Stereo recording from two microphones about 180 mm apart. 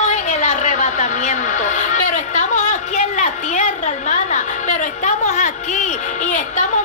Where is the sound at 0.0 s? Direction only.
40° left (ahead or behind).